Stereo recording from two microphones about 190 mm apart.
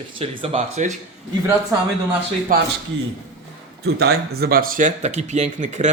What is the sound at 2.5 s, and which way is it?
Speech, 50° right (ahead or behind).